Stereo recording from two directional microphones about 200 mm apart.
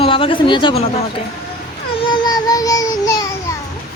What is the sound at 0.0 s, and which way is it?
Speech, 25° left (ahead or behind).